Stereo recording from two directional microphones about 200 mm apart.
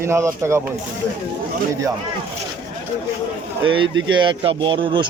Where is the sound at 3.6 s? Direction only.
25° right (ahead or behind).